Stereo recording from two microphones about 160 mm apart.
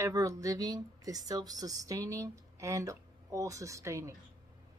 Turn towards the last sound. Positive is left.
turn(degrees=-20)  # may be behind; listen again after turning